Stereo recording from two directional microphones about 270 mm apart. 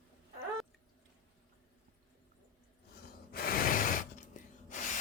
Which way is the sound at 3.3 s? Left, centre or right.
Left.